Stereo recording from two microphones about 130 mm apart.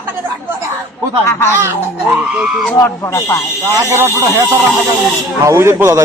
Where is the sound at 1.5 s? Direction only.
15° right (ahead or behind).